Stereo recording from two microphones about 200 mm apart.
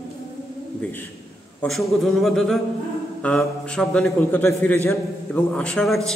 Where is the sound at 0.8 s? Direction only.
10° left (ahead or behind).